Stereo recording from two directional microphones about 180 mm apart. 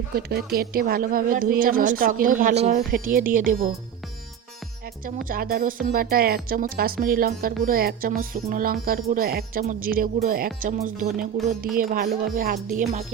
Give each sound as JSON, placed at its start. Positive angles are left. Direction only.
{"t": 0.2, "sound": "speech", "side_deg": -60}
{"t": 5.0, "sound": "speech", "side_deg": -55}
{"t": 12.7, "sound": "speech", "side_deg": -40}